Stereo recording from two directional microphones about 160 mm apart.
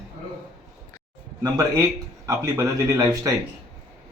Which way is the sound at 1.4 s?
25° right (ahead or behind).